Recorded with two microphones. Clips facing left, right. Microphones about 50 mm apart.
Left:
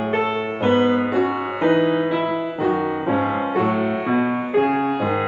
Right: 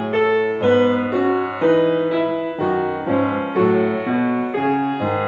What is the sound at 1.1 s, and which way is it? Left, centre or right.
Music, centre.